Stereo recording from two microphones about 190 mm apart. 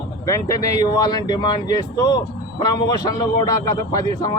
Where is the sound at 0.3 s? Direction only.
15° left (ahead or behind).